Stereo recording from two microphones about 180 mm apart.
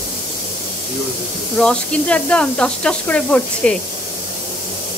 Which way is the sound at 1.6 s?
5° left (ahead or behind).